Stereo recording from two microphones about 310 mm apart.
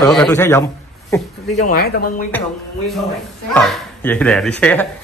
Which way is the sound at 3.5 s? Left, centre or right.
Centre.